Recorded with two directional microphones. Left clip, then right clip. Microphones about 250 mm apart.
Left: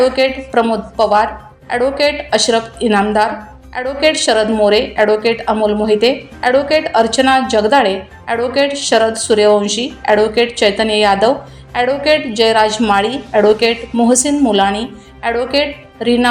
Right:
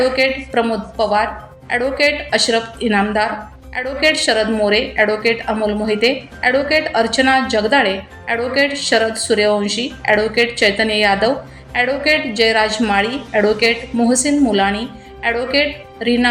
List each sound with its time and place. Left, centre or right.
0.0 s speech: centre